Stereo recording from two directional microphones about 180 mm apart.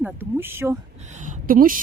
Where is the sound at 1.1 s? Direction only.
40° right (ahead or behind).